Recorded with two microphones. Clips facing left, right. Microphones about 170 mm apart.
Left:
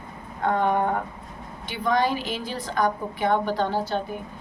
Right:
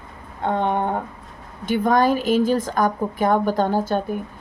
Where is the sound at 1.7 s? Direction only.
45° right (ahead or behind).